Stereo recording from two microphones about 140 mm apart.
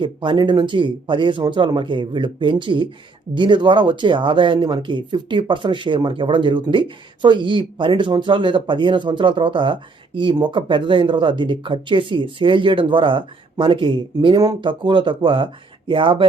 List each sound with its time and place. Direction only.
0.0 s speech: 35° right (ahead or behind)